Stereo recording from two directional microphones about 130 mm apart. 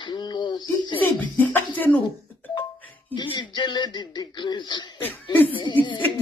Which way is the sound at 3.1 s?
40° left (ahead or behind).